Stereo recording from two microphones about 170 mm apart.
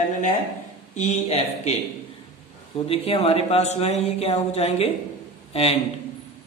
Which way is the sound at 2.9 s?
35° left (ahead or behind).